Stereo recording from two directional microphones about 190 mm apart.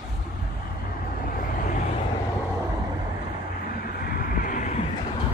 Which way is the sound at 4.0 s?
50° left (ahead or behind).